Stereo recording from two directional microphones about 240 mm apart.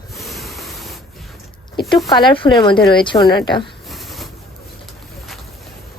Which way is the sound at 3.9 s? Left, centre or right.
Centre.